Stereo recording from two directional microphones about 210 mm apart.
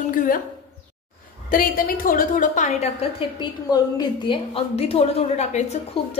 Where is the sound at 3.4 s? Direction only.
20° left (ahead or behind).